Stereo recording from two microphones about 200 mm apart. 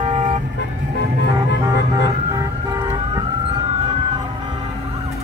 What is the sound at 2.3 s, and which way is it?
Vehicle, 15° right (ahead or behind).